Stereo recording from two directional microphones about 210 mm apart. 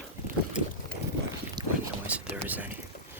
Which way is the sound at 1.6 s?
20° right (ahead or behind).